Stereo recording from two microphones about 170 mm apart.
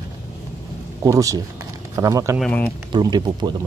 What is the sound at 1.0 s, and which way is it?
Speech, 20° right (ahead or behind).